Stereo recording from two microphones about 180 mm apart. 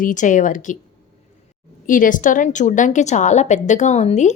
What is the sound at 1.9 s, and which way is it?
A woman's voice, 45° left (ahead or behind).